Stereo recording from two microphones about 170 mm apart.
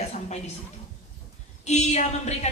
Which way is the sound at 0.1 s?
40° left (ahead or behind).